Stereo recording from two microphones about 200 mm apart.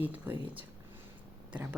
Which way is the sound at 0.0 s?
10° right (ahead or behind).